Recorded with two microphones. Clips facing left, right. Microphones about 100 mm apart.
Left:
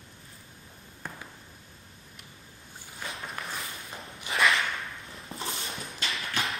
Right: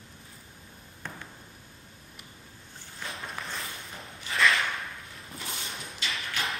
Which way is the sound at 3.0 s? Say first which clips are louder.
Even; centre (ahead or behind).